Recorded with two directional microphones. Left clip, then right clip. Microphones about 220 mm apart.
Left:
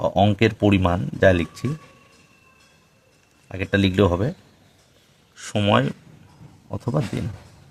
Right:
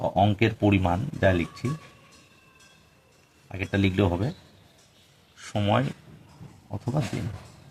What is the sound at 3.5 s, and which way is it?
Speech, 50° left (ahead or behind).